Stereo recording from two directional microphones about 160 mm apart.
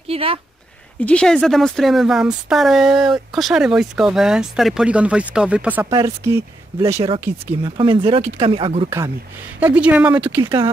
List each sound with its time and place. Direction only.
0.1 s a sound: 35° right (ahead or behind)
1.0 s speech: 5° left (ahead or behind)
5.9 s speech: 20° right (ahead or behind)
7.3 s speech: 40° right (ahead or behind)
7.6 s speech: 30° right (ahead or behind)
9.6 s speech: 10° right (ahead or behind)
10.4 s speech: 25° right (ahead or behind)